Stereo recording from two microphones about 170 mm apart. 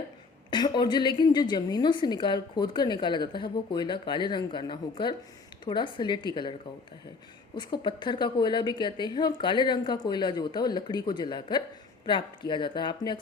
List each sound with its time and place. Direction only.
0.5 s a woman's voice: 25° left (ahead or behind)
7.5 s a woman's voice: 25° left (ahead or behind)